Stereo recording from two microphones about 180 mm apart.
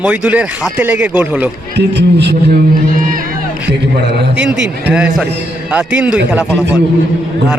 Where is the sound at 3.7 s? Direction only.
65° right (ahead or behind).